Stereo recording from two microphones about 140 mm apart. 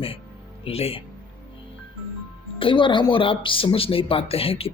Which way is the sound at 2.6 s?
35° left (ahead or behind).